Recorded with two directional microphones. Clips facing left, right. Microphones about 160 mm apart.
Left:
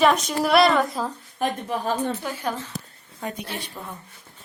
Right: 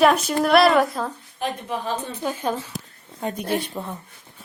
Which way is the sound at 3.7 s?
20° right (ahead or behind).